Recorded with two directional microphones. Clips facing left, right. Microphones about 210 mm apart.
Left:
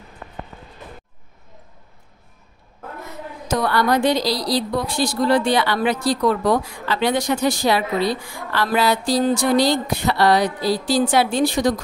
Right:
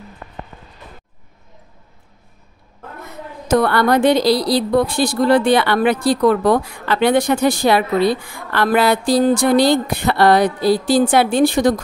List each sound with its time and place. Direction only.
3.4 s a woman's voice: 60° right (ahead or behind)